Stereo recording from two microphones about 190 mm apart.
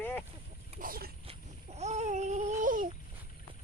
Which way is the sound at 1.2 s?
35° right (ahead or behind).